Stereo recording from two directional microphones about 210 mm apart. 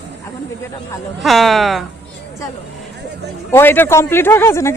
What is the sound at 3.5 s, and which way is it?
A woman's voice, 10° left (ahead or behind).